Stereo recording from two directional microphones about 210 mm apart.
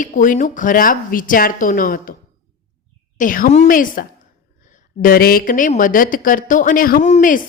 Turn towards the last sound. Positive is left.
turn(degrees=40)  # may be behind; listen again after turning